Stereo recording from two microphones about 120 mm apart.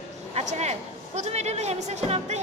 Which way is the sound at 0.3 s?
65° right (ahead or behind).